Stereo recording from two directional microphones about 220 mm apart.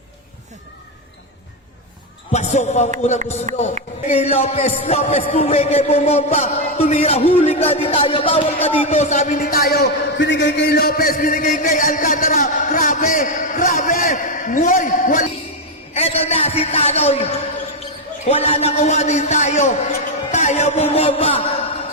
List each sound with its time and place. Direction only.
2.3 s a man's voice: 30° left (ahead or behind)
3.5 s speech: 35° right (ahead or behind)
4.1 s a man's voice: 30° left (ahead or behind)
16.0 s a sound: 25° left (ahead or behind)
18.3 s a man's voice: 25° left (ahead or behind)